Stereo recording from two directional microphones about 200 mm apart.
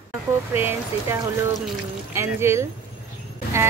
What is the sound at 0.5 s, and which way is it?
Speech, 10° right (ahead or behind).